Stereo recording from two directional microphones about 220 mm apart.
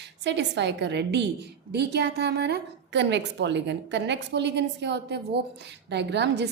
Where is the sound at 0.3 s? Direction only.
50° right (ahead or behind).